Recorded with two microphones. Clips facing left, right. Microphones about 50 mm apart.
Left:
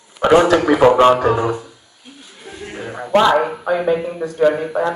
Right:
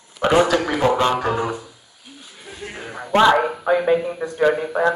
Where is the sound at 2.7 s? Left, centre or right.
Centre.